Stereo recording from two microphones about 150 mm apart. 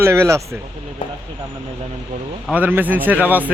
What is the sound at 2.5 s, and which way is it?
Speech, 10° right (ahead or behind).